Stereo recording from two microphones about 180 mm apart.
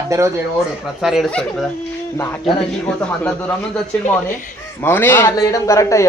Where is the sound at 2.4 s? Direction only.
5° left (ahead or behind).